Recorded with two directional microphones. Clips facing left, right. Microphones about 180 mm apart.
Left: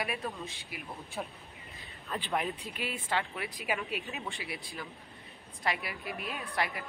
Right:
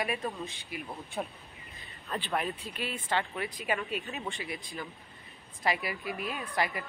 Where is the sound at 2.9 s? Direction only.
Centre (ahead or behind).